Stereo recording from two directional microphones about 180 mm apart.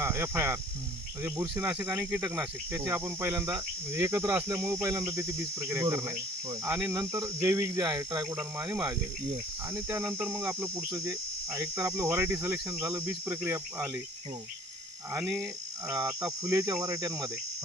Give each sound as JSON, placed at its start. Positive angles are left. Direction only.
{"t": 0.0, "sound": "cricket", "side_deg": -15}
{"t": 15.1, "sound": "cricket", "side_deg": -15}